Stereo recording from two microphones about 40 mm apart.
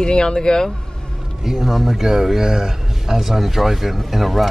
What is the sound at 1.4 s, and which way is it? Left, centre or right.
A man's voice, centre.